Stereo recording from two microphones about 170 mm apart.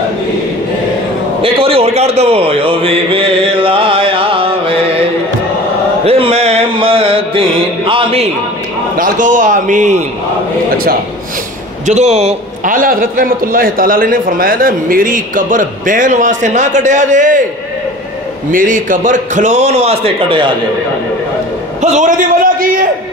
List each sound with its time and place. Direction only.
1.4 s a man's voice: 35° right (ahead or behind)
6.0 s mantra: 35° right (ahead or behind)
8.9 s a man's voice: 50° right (ahead or behind)
11.8 s a man's voice: 40° right (ahead or behind)
12.7 s a man's voice: 55° right (ahead or behind)
18.5 s a man's voice: 50° right (ahead or behind); by 20.5 s 30° right (ahead or behind)
21.8 s a sound: 45° right (ahead or behind)